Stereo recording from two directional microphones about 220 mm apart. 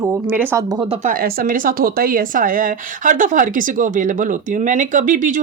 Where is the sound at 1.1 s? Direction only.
40° right (ahead or behind).